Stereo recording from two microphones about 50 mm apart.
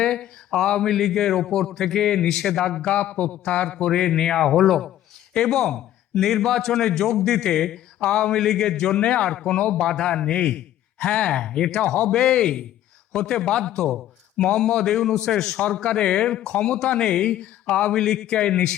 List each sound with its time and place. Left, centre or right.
0.0 s a man's voice: centre
3.0 s speech: left
3.4 s a man's voice: centre
8.0 s a man's voice: left
8.3 s a man's voice: centre